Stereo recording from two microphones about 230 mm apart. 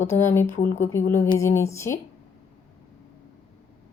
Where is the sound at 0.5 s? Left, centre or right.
Left.